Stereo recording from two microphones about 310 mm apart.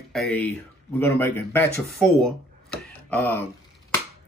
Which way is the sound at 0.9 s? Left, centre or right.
Centre.